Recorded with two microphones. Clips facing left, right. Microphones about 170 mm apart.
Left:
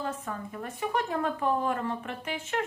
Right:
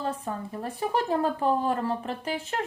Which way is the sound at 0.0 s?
30° right (ahead or behind).